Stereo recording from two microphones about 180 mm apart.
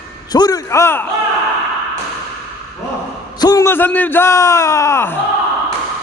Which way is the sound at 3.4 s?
20° left (ahead or behind).